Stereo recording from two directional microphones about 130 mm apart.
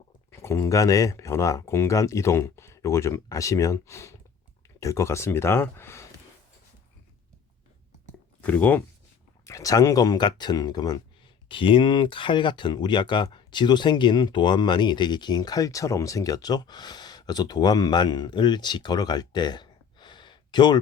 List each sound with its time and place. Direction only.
0.3 s speech: 20° left (ahead or behind)
8.4 s speech: 10° left (ahead or behind)
9.5 s speech: 25° left (ahead or behind)